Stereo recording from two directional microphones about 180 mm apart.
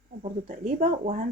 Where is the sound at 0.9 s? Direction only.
35° right (ahead or behind).